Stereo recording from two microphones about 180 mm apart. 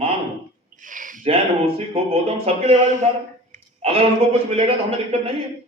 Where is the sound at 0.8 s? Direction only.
45° right (ahead or behind).